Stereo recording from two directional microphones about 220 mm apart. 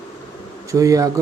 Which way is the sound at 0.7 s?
15° right (ahead or behind).